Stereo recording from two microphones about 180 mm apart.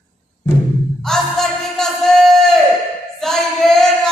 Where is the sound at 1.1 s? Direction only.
Centre (ahead or behind).